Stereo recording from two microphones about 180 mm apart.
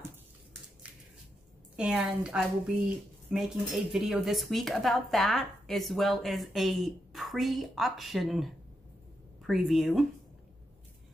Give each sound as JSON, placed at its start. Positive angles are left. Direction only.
{"t": 1.8, "sound": "speech", "side_deg": -5}